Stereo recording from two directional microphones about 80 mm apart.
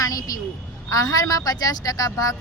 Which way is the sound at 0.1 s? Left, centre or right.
Left.